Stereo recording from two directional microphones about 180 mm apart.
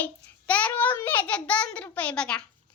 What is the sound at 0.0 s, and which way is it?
A child's voice, 5° left (ahead or behind).